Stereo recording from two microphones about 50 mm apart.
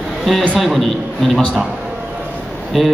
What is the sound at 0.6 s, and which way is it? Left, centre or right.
Speech, centre.